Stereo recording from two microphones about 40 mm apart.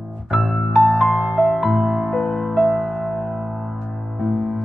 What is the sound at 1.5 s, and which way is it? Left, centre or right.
Music, centre.